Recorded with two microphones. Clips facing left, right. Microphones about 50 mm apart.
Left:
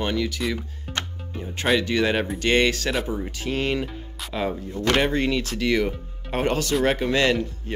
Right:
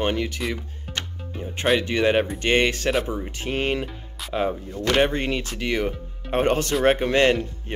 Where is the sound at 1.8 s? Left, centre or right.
Right.